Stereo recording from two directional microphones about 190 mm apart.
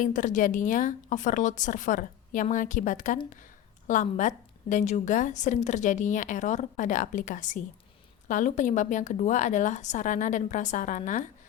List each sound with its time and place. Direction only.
0.0 s a woman's voice: 40° left (ahead or behind)